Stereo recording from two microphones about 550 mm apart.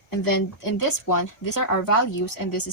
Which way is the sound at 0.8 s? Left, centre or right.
Left.